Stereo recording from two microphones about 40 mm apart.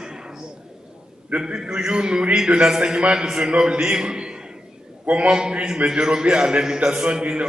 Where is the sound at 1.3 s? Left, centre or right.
Centre.